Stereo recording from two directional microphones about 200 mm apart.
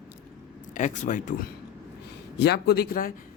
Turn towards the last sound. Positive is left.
turn(degrees=45)  # may be behind; listen again after turning